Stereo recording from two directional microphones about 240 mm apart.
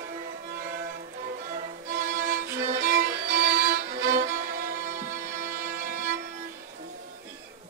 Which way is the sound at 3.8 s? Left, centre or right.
Right.